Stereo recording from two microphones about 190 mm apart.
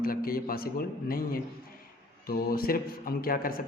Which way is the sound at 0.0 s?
50° left (ahead or behind).